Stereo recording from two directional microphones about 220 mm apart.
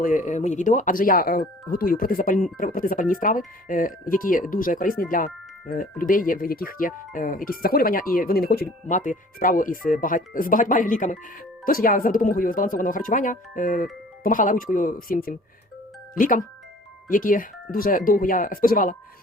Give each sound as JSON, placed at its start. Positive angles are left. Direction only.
{"t": 0.0, "sound": "speech", "side_deg": 35}